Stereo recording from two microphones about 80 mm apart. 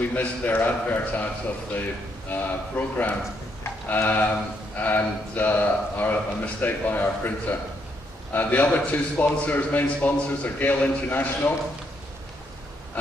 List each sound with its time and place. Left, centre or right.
0.0 s speech: left
2.3 s speech: left